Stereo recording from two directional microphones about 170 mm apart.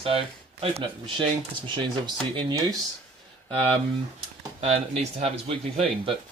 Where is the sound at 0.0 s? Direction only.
35° right (ahead or behind).